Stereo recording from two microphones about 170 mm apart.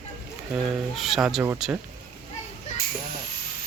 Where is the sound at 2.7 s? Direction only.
40° left (ahead or behind).